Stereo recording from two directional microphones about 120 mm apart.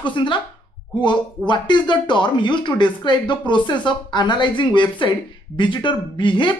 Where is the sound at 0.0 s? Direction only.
40° left (ahead or behind).